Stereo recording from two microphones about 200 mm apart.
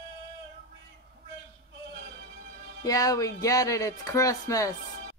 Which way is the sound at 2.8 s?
20° left (ahead or behind).